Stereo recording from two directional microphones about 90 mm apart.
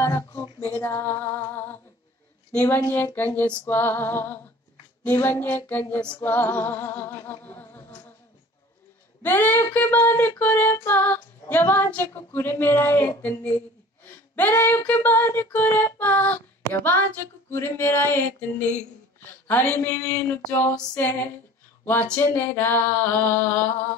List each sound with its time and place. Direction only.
0.0 s female singing: 30° left (ahead or behind)
9.2 s female singing: 25° left (ahead or behind)
14.0 s speech: 20° left (ahead or behind)
14.9 s female singing: 20° left (ahead or behind)
19.4 s a sound: 20° left (ahead or behind)
19.9 s female singing: 35° left (ahead or behind)
22.2 s female singing: 25° left (ahead or behind)